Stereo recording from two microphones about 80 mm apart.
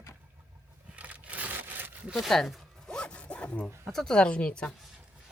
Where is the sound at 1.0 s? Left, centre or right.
Centre.